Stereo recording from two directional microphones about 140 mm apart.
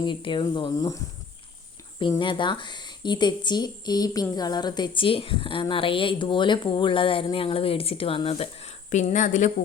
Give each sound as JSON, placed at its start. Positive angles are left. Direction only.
{"t": 0.0, "sound": "a woman's voice", "side_deg": 35}
{"t": 2.0, "sound": "a woman's voice", "side_deg": 35}